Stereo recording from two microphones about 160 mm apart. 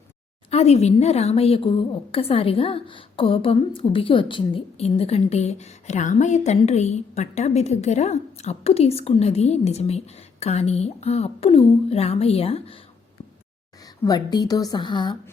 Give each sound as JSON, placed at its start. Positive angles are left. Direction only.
{"t": 0.5, "sound": "a woman's voice", "side_deg": 40}
{"t": 13.8, "sound": "a woman's voice", "side_deg": 25}